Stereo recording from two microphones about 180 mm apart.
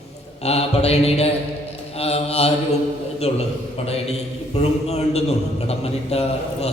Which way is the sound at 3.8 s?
35° left (ahead or behind).